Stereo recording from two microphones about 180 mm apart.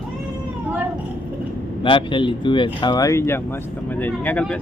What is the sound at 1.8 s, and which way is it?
Speech, 30° left (ahead or behind).